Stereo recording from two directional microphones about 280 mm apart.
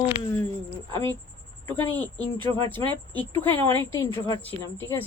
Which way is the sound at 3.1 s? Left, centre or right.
Centre.